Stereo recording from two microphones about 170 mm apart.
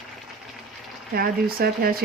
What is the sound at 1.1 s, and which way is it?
Speech, 60° right (ahead or behind).